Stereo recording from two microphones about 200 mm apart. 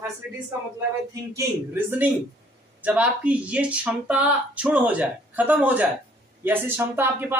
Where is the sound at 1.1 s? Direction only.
10° right (ahead or behind).